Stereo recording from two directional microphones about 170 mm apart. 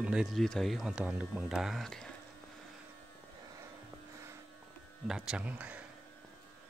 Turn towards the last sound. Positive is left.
turn(degrees=-5)  # may be behind; listen again after turning